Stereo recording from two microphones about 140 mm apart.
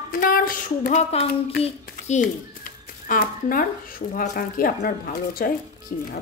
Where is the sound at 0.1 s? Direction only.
80° left.